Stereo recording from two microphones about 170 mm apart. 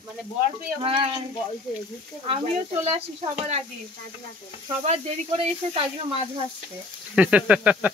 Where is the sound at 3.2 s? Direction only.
35° right (ahead or behind).